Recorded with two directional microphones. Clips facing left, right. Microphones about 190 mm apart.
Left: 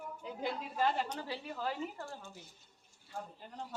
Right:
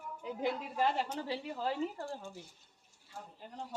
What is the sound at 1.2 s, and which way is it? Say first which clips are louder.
Speech: right 3 dB; 25° right (ahead or behind).